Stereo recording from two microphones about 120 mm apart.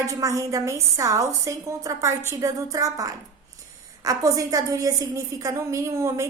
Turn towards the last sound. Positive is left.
turn(degrees=-25)  # may be behind; listen again after turning